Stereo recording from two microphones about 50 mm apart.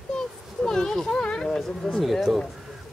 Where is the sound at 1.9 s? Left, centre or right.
Centre.